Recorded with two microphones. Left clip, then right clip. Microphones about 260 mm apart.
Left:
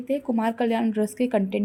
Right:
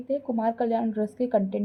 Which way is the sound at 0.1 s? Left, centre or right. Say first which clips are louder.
Left 1 dB; left.